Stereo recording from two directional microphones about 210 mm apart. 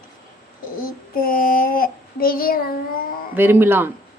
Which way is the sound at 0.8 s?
45° left (ahead or behind).